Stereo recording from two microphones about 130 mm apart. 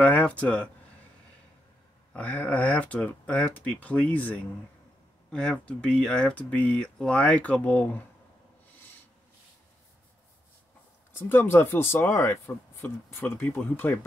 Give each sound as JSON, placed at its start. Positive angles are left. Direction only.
{"t": 0.0, "sound": "speech", "side_deg": 10}
{"t": 2.1, "sound": "speech", "side_deg": 10}
{"t": 11.1, "sound": "speech", "side_deg": 15}